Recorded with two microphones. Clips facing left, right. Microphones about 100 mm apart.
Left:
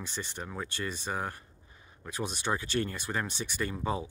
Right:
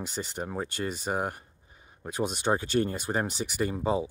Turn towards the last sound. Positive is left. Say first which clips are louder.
# right 5 dB
turn(degrees=-25)  # may be behind; listen again after turning